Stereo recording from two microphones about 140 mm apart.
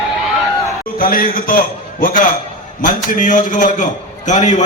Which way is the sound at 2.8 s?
70° left (ahead or behind).